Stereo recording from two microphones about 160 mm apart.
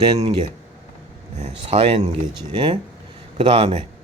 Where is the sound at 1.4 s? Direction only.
45° right (ahead or behind).